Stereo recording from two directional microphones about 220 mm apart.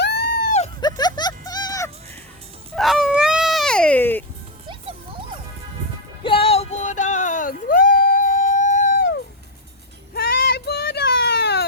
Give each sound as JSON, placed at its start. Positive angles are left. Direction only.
{"t": 0.0, "sound": "a sound", "side_deg": 50}
{"t": 0.5, "sound": "dog", "side_deg": 25}
{"t": 2.7, "sound": "baby cry", "side_deg": 0}
{"t": 4.7, "sound": "music", "side_deg": -20}
{"t": 6.2, "sound": "music", "side_deg": 25}
{"t": 10.2, "sound": "a sound", "side_deg": 45}